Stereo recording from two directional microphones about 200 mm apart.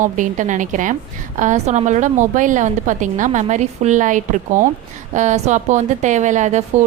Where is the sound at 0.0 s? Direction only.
40° right (ahead or behind).